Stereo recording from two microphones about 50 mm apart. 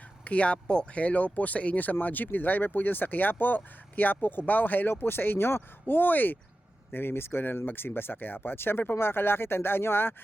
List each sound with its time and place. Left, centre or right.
0.3 s speech: left
5.9 s speech: left
6.9 s speech: left